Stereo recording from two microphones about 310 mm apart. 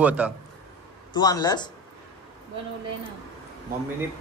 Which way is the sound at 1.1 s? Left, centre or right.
Centre.